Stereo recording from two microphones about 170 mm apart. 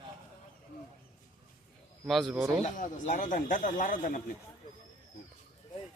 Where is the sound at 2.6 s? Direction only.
50° left (ahead or behind).